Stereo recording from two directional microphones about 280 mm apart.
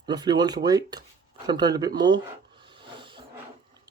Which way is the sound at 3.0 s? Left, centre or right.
Centre.